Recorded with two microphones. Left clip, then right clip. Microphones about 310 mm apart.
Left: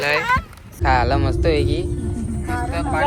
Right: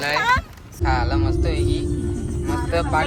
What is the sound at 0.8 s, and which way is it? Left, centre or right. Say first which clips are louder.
Speech: left 5 dB; left.